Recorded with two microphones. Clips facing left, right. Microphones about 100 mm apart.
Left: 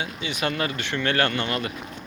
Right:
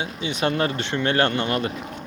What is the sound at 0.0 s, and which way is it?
Speech, 25° right (ahead or behind).